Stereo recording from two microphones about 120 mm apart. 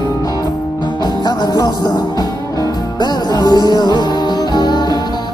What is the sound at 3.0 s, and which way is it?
Music, 35° left (ahead or behind).